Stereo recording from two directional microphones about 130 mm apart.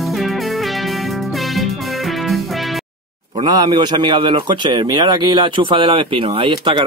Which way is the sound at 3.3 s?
30° right (ahead or behind).